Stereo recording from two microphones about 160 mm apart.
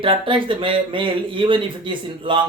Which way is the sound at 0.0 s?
35° right (ahead or behind).